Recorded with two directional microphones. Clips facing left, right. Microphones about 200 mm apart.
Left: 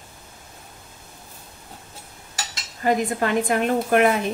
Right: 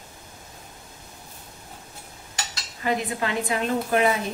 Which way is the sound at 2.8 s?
50° left (ahead or behind).